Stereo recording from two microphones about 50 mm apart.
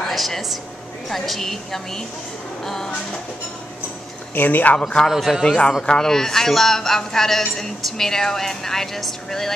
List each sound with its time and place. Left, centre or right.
0.0 s a woman's voice: centre
4.4 s speech: left
4.8 s a woman's voice: centre
5.9 s a woman's voice: centre